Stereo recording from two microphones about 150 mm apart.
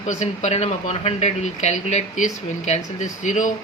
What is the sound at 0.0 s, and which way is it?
Speech, 50° left (ahead or behind).